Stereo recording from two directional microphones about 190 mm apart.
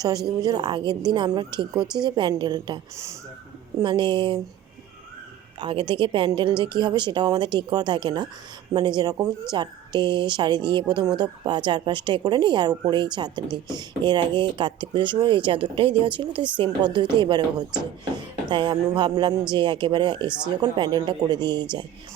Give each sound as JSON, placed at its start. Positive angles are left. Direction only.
{"t": 0.4, "sound": "speech", "side_deg": -20}
{"t": 3.8, "sound": "speech", "side_deg": -25}
{"t": 5.5, "sound": "speech", "side_deg": -25}